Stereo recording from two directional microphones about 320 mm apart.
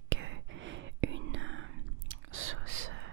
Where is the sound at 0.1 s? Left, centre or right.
Right.